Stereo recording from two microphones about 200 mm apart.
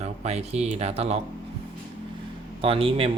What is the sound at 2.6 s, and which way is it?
Speech, 30° right (ahead or behind).